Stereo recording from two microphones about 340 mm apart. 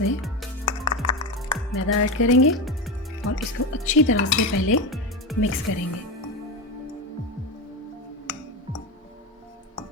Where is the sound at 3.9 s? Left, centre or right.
Left.